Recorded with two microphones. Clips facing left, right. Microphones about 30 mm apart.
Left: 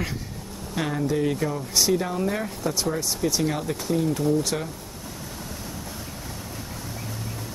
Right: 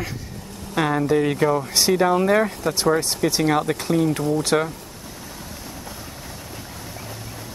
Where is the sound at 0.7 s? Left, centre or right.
Right.